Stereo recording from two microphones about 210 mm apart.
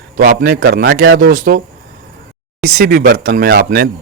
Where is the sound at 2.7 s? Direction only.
45° right (ahead or behind).